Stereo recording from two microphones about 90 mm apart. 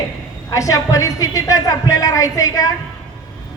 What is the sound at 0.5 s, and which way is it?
A woman's voice, 40° left (ahead or behind).